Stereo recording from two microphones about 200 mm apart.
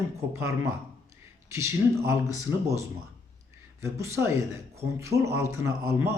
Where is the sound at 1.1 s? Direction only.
15° right (ahead or behind).